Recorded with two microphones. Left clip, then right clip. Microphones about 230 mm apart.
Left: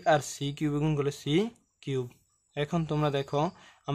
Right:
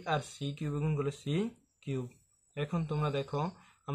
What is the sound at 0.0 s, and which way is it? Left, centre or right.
Speech, left.